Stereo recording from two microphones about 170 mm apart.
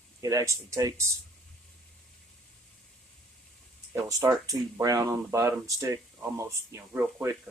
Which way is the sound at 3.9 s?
15° right (ahead or behind).